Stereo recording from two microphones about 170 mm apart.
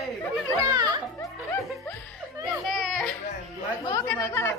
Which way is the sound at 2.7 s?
Centre (ahead or behind).